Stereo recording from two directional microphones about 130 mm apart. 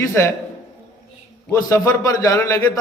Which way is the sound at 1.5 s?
25° left (ahead or behind).